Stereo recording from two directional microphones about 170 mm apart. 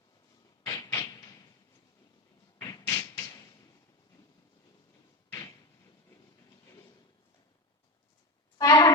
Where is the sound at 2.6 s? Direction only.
20° left (ahead or behind).